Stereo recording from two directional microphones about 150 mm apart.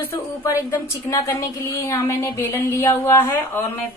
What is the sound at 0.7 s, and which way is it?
Speech, 20° left (ahead or behind).